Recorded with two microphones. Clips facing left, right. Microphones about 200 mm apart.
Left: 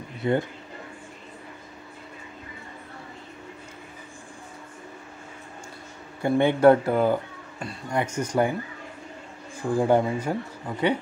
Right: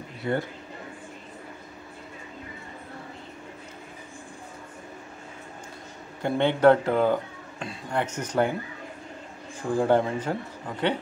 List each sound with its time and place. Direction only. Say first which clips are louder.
0.2 s speech: left 4 dB; 20° left (ahead or behind)
6.2 s a man's voice: left 2 dB; 10° left (ahead or behind)
9.6 s a man's voice: left 1 dB; 10° left (ahead or behind)